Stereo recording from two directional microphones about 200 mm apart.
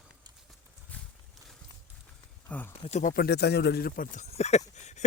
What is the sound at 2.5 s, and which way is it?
Speech, 10° left (ahead or behind).